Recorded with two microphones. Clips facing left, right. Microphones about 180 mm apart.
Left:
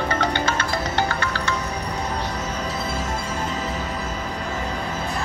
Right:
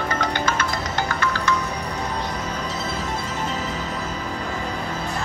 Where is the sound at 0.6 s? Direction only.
30° left (ahead or behind).